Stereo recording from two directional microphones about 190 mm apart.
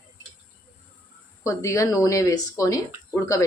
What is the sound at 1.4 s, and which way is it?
Speech, 15° left (ahead or behind).